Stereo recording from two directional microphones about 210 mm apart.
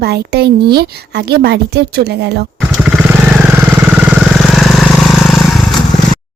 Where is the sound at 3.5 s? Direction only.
5° right (ahead or behind).